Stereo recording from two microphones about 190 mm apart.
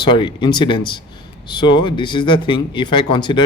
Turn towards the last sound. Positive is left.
turn(degrees=25)  # may be behind; listen again after turning